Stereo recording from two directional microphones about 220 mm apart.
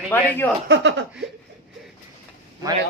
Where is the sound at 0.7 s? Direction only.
55° right (ahead or behind).